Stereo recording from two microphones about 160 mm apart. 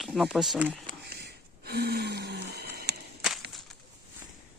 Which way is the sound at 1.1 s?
85° right.